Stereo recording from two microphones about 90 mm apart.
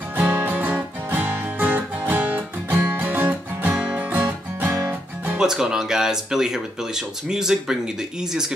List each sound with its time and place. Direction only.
0.1 s music: 20° right (ahead or behind)
5.4 s speech: 5° right (ahead or behind)